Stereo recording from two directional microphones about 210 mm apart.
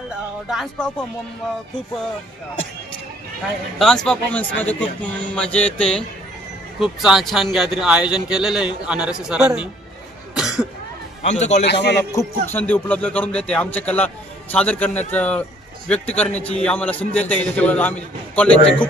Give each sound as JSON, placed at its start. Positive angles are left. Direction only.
{"t": 0.1, "sound": "speech", "side_deg": 0}
{"t": 3.7, "sound": "a man's voice", "side_deg": 0}
{"t": 10.3, "sound": "cough", "side_deg": -5}
{"t": 11.2, "sound": "a man's voice", "side_deg": 35}
{"t": 11.6, "sound": "a man's voice", "side_deg": 55}
{"t": 12.1, "sound": "speech", "side_deg": 15}